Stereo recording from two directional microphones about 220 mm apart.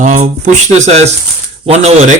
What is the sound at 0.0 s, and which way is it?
Speech, 35° right (ahead or behind).